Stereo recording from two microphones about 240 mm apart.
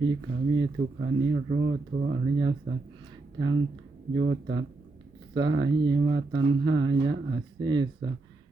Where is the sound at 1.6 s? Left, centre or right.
Right.